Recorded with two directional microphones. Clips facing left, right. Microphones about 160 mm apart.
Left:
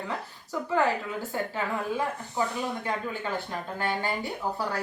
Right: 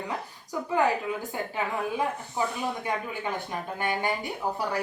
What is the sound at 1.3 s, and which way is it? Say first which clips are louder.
Speech: even; 15° right (ahead or behind).